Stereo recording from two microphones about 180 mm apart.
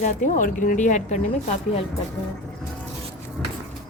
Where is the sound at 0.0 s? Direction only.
45° left (ahead or behind).